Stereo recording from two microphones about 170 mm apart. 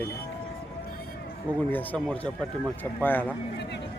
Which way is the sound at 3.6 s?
90° left.